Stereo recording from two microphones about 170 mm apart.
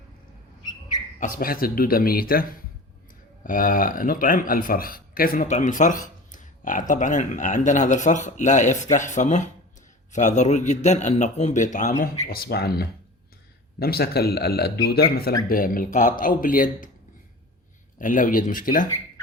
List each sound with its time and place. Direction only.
1.2 s speech: 55° left (ahead or behind)
5.5 s speech: 45° left (ahead or behind)
12.3 s speech: 65° left (ahead or behind)
18.0 s speech: 55° left (ahead or behind)